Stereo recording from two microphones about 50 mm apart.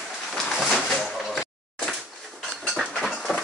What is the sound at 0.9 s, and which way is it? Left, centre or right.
Door, centre.